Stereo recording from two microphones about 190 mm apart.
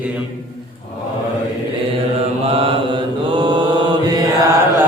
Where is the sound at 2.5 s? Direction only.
30° right (ahead or behind).